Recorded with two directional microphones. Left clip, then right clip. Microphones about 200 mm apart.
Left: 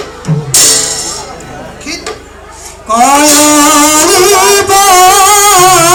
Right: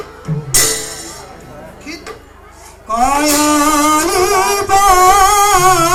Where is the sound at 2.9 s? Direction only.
50° left (ahead or behind).